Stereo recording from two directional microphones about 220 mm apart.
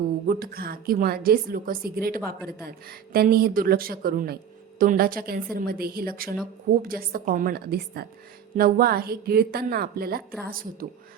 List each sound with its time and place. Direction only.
0.3 s a woman's voice: 40° right (ahead or behind)